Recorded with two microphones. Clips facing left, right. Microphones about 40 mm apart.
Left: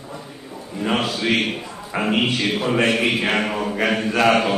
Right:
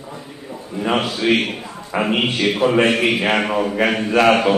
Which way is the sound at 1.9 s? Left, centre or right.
Centre.